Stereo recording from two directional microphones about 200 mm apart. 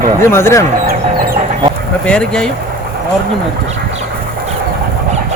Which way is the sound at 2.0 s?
5° left (ahead or behind).